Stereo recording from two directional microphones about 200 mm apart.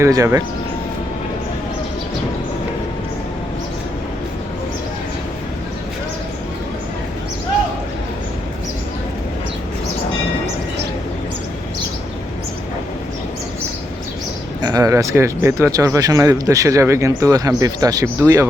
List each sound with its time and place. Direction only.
0.0 s speech: 15° right (ahead or behind)
14.6 s speech: 20° right (ahead or behind)